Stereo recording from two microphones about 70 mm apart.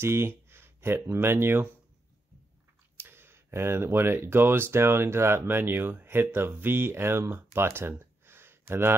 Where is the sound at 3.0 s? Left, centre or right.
Right.